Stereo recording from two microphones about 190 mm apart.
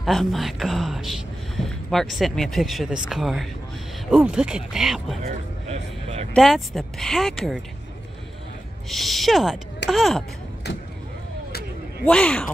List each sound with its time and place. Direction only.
0.0 s speech: centre (ahead or behind)
5.7 s vehicle: 35° right (ahead or behind)
6.3 s speech: centre (ahead or behind)
8.8 s speech: centre (ahead or behind)
12.0 s speech: 5° left (ahead or behind)